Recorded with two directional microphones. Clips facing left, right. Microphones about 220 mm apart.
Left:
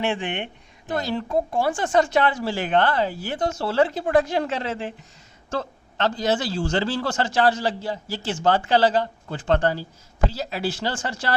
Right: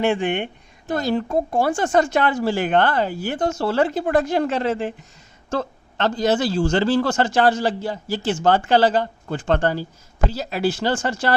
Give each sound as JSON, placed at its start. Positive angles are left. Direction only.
{"t": 0.0, "sound": "speech", "side_deg": -45}